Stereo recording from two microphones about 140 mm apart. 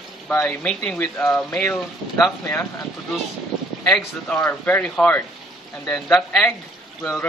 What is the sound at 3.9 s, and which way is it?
Speech, 5° left (ahead or behind).